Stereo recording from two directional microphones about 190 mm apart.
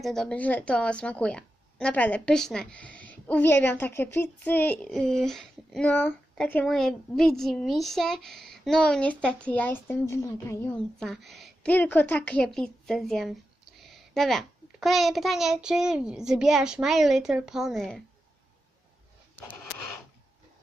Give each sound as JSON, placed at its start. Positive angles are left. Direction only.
{"t": 0.0, "sound": "a woman's voice", "side_deg": 0}
{"t": 11.0, "sound": "a woman's voice", "side_deg": 0}